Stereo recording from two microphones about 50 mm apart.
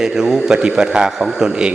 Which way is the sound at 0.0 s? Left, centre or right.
Centre.